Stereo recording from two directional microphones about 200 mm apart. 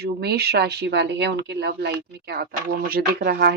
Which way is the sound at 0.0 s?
55° right (ahead or behind).